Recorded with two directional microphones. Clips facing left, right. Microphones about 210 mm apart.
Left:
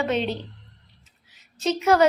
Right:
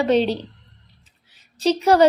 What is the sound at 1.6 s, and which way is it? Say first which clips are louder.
Speech: right 4 dB; 35° right (ahead or behind).